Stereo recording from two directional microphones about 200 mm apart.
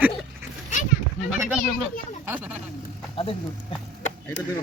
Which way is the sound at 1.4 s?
10° right (ahead or behind).